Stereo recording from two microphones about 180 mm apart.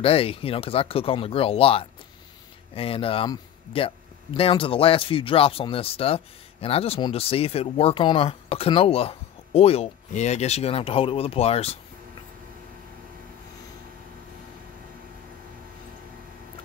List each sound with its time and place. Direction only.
0.0 s speech: 30° left (ahead or behind)